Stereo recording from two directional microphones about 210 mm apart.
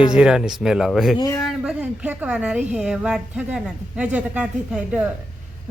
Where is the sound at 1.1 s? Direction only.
15° left (ahead or behind).